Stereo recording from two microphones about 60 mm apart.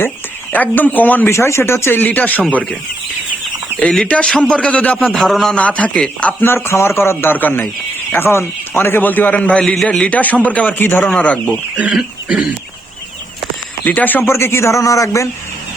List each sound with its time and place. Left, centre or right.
0.5 s a man's voice: left
1.3 s speech: left
2.0 s a man's voice: left
4.3 s a man's voice: centre
5.1 s a man's voice: centre
5.5 s a man's voice: left
6.4 s a man's voice: left; by 10.1 s centre
10.1 s a man's voice: left
11.2 s a man's voice: left
11.8 s speech: centre
13.8 s a man's voice: left
14.3 s a man's voice: left